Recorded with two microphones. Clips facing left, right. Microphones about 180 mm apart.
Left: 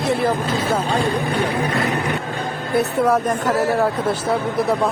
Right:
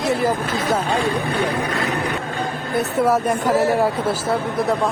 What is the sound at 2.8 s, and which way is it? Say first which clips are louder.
Speech: left 1 dB; 5° right (ahead or behind).